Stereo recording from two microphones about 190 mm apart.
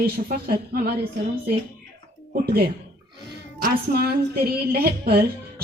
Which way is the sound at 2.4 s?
55° right (ahead or behind).